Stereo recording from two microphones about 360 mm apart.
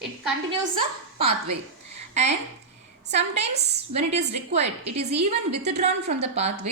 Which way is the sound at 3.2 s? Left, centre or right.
Centre.